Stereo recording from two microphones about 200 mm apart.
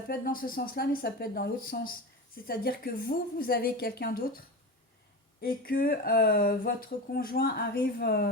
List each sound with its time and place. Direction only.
0.1 s speech: 45° left (ahead or behind)